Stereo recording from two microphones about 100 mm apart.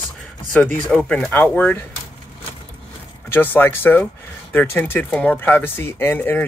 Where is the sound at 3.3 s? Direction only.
20° left (ahead or behind).